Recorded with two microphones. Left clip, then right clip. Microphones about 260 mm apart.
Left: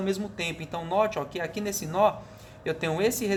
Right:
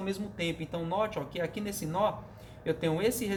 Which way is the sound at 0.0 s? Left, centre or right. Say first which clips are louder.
Left 5 dB; left.